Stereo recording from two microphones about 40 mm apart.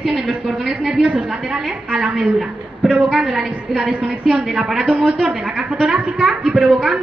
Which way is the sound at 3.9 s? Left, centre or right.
Right.